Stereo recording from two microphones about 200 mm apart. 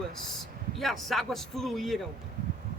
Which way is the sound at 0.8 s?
Centre (ahead or behind).